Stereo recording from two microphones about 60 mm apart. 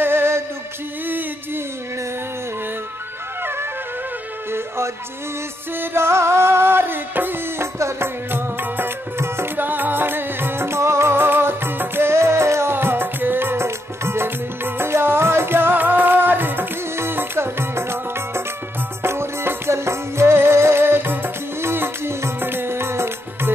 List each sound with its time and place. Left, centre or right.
0.0 s music: right
4.5 s music: right
8.3 s music: right